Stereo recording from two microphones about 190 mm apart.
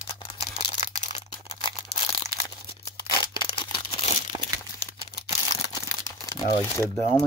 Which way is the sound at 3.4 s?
25° left (ahead or behind).